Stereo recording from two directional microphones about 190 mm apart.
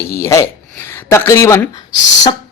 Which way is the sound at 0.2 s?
15° left (ahead or behind).